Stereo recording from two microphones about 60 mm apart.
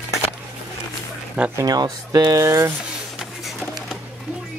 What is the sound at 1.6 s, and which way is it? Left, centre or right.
Speech, right.